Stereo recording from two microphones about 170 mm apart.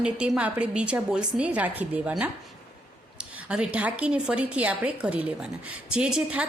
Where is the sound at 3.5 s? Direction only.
5° right (ahead or behind).